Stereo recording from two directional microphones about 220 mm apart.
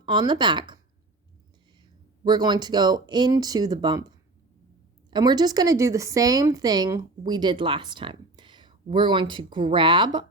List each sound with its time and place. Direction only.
0.1 s speech: 20° right (ahead or behind)
2.2 s speech: 20° right (ahead or behind)
5.1 s speech: 20° right (ahead or behind)